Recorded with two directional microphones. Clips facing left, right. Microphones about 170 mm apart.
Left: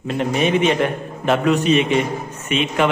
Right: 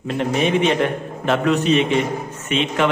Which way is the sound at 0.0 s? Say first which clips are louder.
Even; 5° left (ahead or behind).